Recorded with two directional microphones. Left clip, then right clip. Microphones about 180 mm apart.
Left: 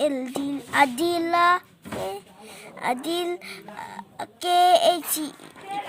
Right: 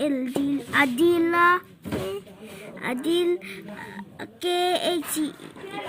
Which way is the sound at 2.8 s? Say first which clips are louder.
Right 1 dB; 50° left (ahead or behind).